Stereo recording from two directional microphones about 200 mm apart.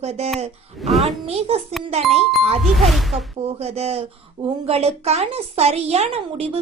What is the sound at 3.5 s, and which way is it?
A woman's voice, 30° right (ahead or behind).